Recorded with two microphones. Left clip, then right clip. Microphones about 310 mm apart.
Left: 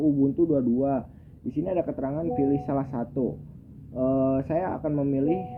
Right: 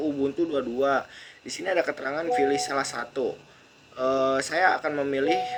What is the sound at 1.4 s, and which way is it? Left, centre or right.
Speech, centre.